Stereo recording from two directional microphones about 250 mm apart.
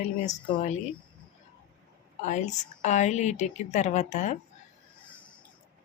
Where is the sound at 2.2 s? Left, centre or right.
Left.